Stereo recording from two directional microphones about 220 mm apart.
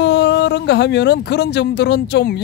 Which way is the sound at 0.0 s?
50° left (ahead or behind).